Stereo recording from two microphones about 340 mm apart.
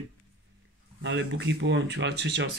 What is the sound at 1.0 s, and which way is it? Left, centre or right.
Speech, right.